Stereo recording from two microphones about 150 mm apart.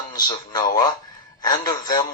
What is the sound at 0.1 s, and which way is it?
Speech, 25° left (ahead or behind).